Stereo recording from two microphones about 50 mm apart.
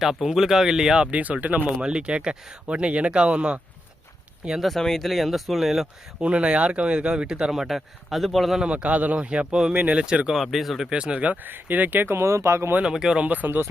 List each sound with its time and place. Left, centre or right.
0.0 s speech: centre
1.1 s speech: right
1.8 s speech: right
4.6 s speech: centre
6.1 s speech: right
7.5 s speech: centre
8.5 s speech: right
10.3 s speech: centre
10.8 s speech: right
11.4 s speech: right
12.0 s speech: right
12.8 s speech: centre
13.2 s speech: right